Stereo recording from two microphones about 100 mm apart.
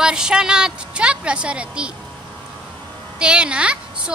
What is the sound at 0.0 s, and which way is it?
A woman's voice, 5° right (ahead or behind).